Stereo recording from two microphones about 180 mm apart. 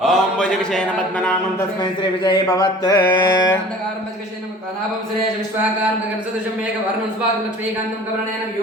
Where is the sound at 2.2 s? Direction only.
20° left (ahead or behind).